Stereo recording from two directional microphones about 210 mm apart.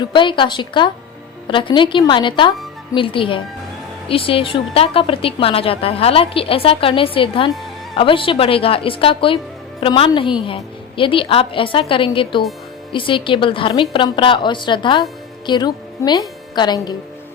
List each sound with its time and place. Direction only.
0.0 s a woman's voice: 20° left (ahead or behind)